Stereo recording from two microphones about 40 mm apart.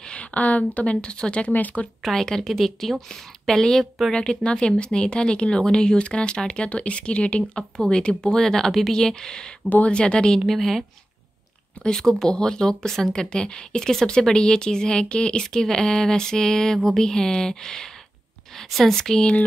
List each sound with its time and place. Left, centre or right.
0.1 s speech: left
1.0 s speech: left
1.5 s speech: left
2.0 s speech: centre
4.1 s speech: left
10.4 s a woman's voice: centre
11.8 s speech: centre
13.2 s speech: left